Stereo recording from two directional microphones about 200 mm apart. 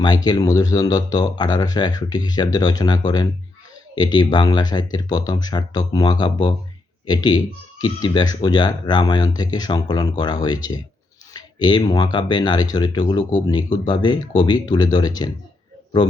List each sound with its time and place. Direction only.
0.0 s speech: 20° left (ahead or behind)